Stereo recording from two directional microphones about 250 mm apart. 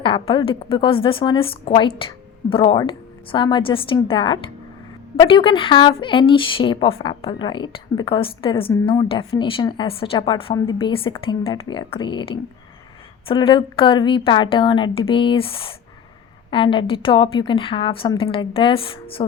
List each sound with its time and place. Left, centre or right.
0.0 s a woman's voice: centre